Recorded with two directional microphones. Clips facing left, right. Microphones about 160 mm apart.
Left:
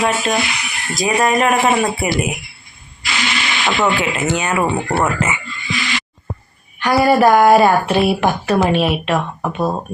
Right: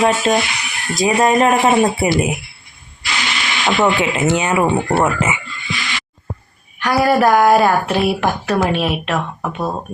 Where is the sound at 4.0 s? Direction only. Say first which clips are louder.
Right 2 dB; 20° right (ahead or behind).